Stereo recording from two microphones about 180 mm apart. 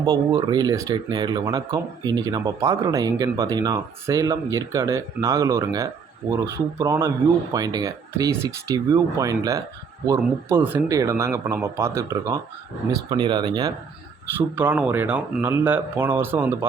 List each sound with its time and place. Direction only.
0.0 s speech: 20° right (ahead or behind)
14.3 s speech: 10° right (ahead or behind)